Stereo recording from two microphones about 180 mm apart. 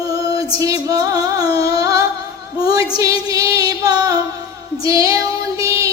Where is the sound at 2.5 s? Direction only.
20° right (ahead or behind).